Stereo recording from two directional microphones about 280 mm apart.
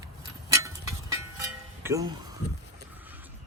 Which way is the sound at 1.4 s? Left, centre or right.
Centre.